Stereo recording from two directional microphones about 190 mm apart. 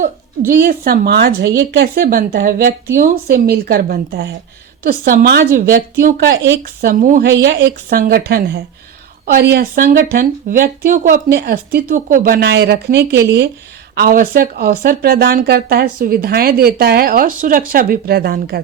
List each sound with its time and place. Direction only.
0.0 s speech: 50° right (ahead or behind)
6.8 s speech: 45° right (ahead or behind)
7.3 s a woman's voice: 60° right (ahead or behind)